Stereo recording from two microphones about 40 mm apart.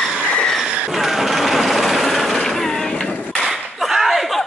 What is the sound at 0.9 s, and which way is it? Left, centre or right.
Vehicle, centre.